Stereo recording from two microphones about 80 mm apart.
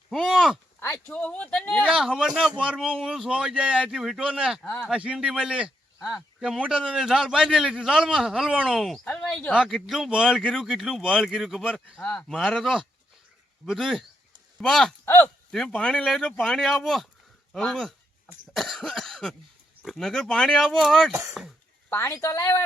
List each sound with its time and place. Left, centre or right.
0.1 s a sound: centre
0.8 s a sound: left
1.1 s a sound: centre
1.8 s a man's voice: centre
4.6 s speech: centre
4.9 s a man's voice: centre
11.9 s speech: centre
12.3 s speech: centre
15.0 s speech: left
15.7 s speech: centre
21.1 s speech: right
21.8 s speech: left